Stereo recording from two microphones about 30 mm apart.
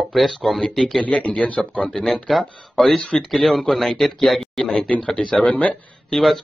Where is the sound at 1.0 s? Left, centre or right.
Left.